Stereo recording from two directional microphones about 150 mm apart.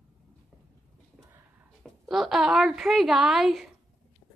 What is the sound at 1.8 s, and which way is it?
A woman's voice, centre (ahead or behind).